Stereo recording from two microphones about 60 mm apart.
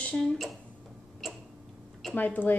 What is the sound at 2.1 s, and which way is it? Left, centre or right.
Speech, left.